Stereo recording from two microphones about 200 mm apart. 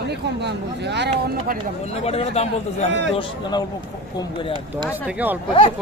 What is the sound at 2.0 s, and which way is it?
Speech, 30° left (ahead or behind).